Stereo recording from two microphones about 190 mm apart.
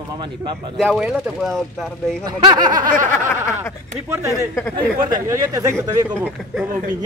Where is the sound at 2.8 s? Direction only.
45° right (ahead or behind).